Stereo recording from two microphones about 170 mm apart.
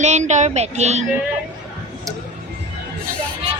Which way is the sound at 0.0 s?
45° right (ahead or behind).